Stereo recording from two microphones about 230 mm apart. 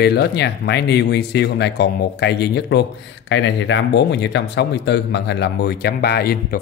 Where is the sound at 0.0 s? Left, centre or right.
Left.